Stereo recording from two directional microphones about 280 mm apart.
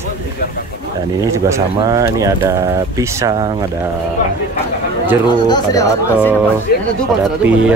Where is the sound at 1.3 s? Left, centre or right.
Centre.